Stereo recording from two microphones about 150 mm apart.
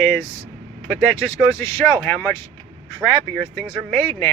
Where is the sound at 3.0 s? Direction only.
Centre (ahead or behind).